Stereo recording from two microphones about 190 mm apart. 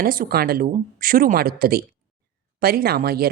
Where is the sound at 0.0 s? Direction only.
50° right (ahead or behind).